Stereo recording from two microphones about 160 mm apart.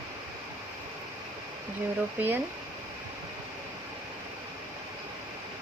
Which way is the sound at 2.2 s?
10° right (ahead or behind).